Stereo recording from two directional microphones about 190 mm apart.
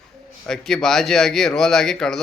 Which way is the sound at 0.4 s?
Centre (ahead or behind).